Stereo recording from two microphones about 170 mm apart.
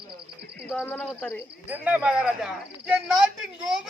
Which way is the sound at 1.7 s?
10° right (ahead or behind).